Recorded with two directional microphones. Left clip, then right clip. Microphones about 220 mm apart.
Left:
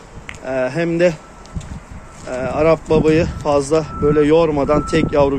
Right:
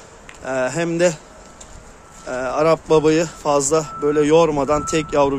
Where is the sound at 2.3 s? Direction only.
15° right (ahead or behind).